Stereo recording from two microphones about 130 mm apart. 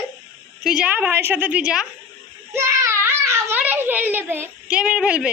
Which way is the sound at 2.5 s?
20° right (ahead or behind).